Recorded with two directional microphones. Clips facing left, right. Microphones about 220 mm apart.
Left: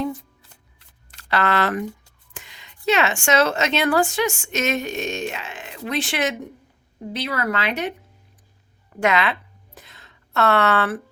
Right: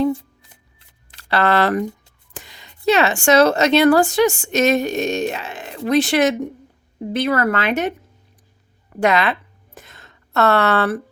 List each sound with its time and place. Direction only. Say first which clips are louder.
0.0 s speech: right 7 dB; 30° right (ahead or behind); by 7.9 s 45° right (ahead or behind)
9.0 s speech: right 3 dB; 35° right (ahead or behind)
9.7 s a sound: right 4 dB; 50° right (ahead or behind)